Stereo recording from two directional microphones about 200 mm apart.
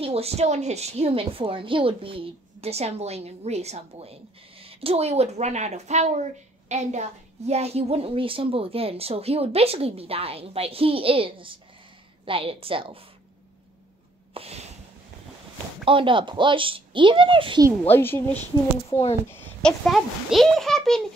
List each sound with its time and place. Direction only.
0.0 s a woman's voice: 30° right (ahead or behind)
14.3 s a sound: 30° right (ahead or behind)
15.8 s a woman's voice: 25° right (ahead or behind)
17.8 s a woman's voice: 10° left (ahead or behind)